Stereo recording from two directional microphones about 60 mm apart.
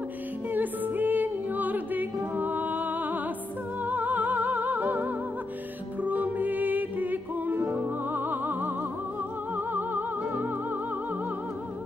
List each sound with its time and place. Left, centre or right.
0.5 s music: right